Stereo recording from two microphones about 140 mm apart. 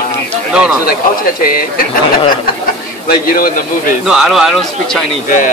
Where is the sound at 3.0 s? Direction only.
90° left.